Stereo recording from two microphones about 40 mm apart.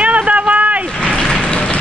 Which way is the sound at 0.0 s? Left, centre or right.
Right.